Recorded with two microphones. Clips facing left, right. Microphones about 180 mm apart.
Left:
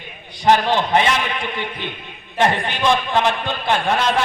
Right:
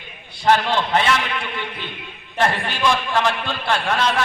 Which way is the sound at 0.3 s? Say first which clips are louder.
Left 2 dB; 15° left (ahead or behind).